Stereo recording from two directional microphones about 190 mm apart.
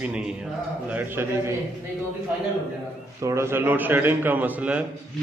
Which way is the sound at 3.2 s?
15° right (ahead or behind).